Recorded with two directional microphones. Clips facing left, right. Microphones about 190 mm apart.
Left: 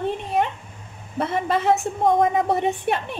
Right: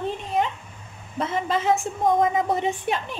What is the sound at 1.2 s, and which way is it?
A woman's voice, 60° left (ahead or behind).